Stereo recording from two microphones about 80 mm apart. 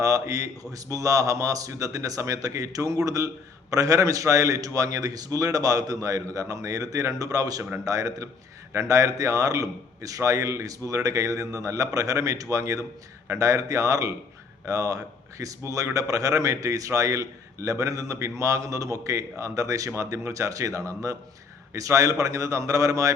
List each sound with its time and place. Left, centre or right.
0.0 s a man's voice: right